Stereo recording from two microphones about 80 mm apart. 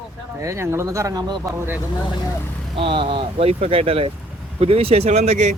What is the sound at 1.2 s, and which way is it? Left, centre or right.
Speech, right.